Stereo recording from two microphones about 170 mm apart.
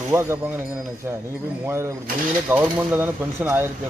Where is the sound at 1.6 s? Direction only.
15° right (ahead or behind).